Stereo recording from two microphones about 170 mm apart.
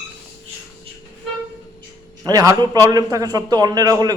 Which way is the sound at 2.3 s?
20° right (ahead or behind).